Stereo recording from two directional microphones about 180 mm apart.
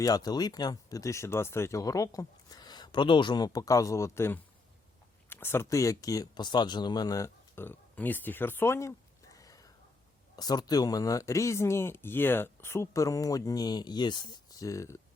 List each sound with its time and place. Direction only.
0.0 s speech: 20° left (ahead or behind)